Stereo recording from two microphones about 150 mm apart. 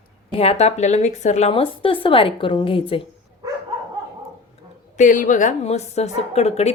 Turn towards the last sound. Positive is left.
turn(degrees=45)  # may be behind; listen again after turning